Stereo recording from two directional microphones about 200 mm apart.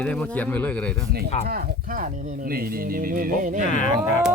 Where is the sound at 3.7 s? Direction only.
40° left (ahead or behind).